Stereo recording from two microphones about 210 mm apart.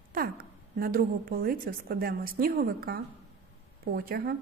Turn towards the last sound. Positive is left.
turn(degrees=-45)  # may be behind; listen again after turning